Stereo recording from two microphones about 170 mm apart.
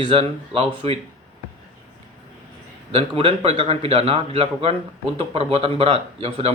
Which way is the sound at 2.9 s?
35° right (ahead or behind).